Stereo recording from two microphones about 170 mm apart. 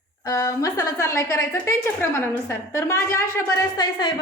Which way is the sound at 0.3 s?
20° left (ahead or behind).